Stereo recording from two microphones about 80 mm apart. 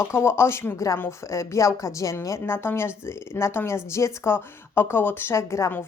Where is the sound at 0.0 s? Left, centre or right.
Left.